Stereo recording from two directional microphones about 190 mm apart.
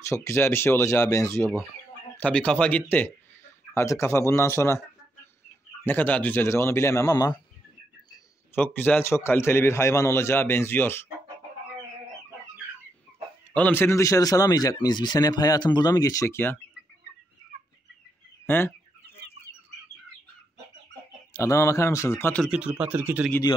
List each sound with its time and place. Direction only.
0.0 s a man's voice: 15° left (ahead or behind)
5.9 s a man's voice: 10° left (ahead or behind)
8.7 s a man's voice: 10° left (ahead or behind)
13.6 s speech: 10° left (ahead or behind)
18.5 s a man's voice: 10° left (ahead or behind)
21.3 s a man's voice: 15° left (ahead or behind)
22.5 s speech: 5° right (ahead or behind)